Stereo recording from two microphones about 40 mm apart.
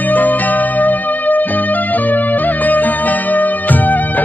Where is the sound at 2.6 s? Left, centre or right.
Left.